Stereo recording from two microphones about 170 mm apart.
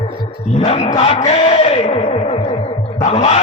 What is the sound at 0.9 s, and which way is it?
Music, 35° left (ahead or behind).